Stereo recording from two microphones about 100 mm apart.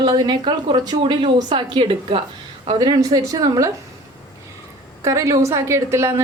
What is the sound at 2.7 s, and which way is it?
Speech, 40° right (ahead or behind).